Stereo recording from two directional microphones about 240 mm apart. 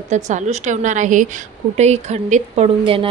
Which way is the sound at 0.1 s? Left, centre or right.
Right.